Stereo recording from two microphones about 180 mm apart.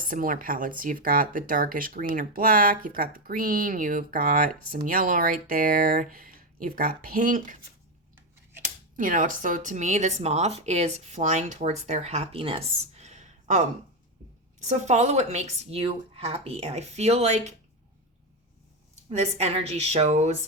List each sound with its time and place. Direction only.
0.1 s speech: 50° right (ahead or behind)
9.0 s speech: 50° right (ahead or behind)
14.6 s speech: 40° right (ahead or behind)
19.1 s speech: 35° right (ahead or behind)